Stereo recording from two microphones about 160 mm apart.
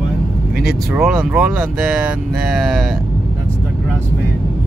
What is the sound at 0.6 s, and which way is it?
Speech, centre (ahead or behind).